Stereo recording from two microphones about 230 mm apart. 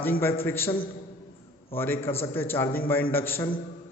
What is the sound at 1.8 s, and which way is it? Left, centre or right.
A man's voice, centre.